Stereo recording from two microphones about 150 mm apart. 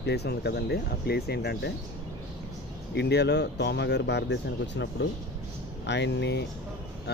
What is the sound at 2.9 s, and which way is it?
Speech, 90° left.